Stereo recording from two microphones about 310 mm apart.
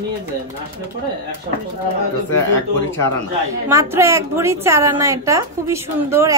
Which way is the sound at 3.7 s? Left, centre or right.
Centre.